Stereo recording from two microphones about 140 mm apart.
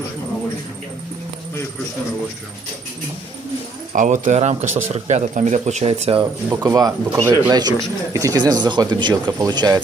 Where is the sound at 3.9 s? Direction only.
65° right (ahead or behind); by 6.2 s 45° right (ahead or behind).